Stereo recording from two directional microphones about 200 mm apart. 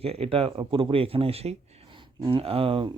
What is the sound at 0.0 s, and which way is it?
Speech, 30° right (ahead or behind).